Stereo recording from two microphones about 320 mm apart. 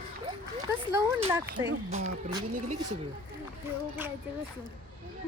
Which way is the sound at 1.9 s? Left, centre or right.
Right.